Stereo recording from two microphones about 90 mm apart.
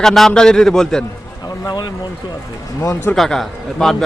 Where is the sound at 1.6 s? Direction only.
55° left (ahead or behind).